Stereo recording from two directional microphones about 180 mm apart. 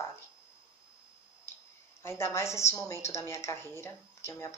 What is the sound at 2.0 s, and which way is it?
A woman's voice, 15° left (ahead or behind).